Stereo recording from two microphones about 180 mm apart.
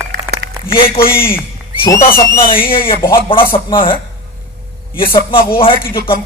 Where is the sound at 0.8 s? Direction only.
30° left (ahead or behind).